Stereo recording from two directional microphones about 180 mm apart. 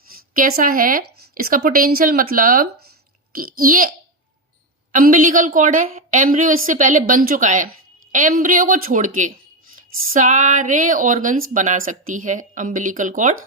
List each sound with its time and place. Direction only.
0.1 s speech: 50° right (ahead or behind)